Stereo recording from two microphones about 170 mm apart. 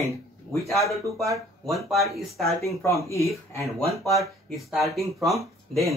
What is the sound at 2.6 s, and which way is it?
Speech, 15° left (ahead or behind).